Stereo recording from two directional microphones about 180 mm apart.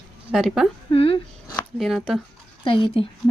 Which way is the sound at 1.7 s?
Centre (ahead or behind).